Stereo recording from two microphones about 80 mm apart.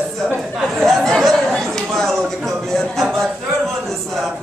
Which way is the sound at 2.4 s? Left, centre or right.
Centre.